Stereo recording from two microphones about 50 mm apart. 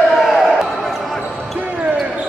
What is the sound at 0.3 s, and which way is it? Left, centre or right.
Basketball bounce, centre.